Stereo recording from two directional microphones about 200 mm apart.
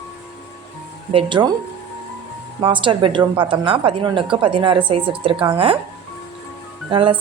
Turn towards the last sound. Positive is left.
turn(degrees=-25)  # may be behind; listen again after turning